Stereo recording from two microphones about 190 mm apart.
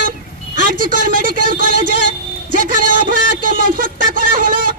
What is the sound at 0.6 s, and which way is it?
A man's voice, 45° right (ahead or behind).